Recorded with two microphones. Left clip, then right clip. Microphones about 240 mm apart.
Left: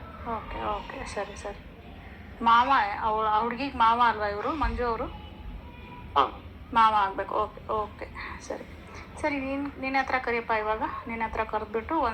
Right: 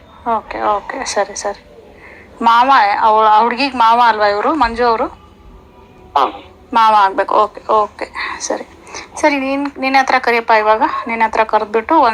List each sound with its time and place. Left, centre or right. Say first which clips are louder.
0.3 s a woman's voice: right 16 dB; right
6.1 s a woman's voice: right 10 dB; right